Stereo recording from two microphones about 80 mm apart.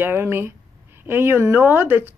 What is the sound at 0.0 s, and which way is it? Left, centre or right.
Speech, right.